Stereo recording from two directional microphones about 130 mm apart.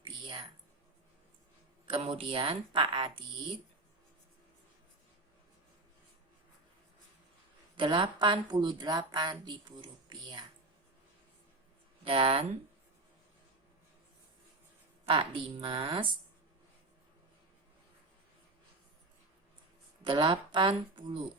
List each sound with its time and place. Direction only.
0.0 s a sound: 40° right (ahead or behind)
1.9 s a woman's voice: 45° right (ahead or behind)
7.8 s a woman's voice: 40° right (ahead or behind)
12.0 s a woman's voice: 45° right (ahead or behind)
15.0 s a woman's voice: 45° right (ahead or behind)
20.1 s a woman's voice: 40° right (ahead or behind)